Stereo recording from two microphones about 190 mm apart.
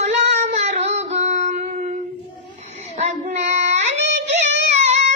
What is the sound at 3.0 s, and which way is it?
Child singing, 35° right (ahead or behind).